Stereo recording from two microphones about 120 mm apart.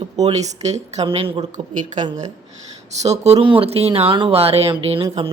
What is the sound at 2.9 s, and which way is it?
Speech, 65° right (ahead or behind).